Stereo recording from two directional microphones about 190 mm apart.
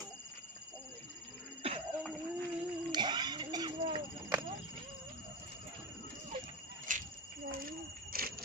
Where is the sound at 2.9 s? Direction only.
25° right (ahead or behind).